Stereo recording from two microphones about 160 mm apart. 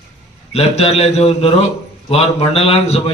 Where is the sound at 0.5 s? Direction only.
40° left (ahead or behind).